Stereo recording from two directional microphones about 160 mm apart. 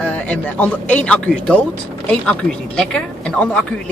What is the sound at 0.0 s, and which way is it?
Speech, 10° left (ahead or behind).